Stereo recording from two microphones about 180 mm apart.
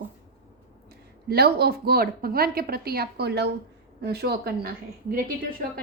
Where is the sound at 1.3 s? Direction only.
60° right (ahead or behind).